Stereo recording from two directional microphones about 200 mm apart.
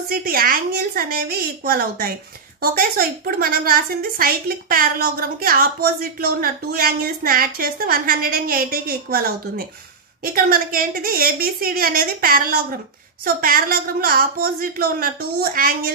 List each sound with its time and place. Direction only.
0.1 s a woman's voice: 45° right (ahead or behind)